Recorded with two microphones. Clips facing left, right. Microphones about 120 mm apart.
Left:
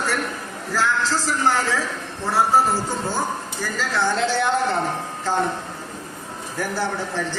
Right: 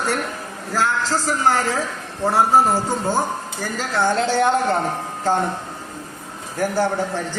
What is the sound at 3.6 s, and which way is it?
Speech, 50° right (ahead or behind).